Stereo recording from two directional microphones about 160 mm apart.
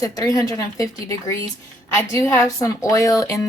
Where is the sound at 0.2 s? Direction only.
20° left (ahead or behind).